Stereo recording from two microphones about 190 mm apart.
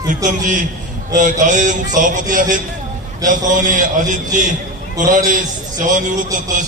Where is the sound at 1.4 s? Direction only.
40° right (ahead or behind).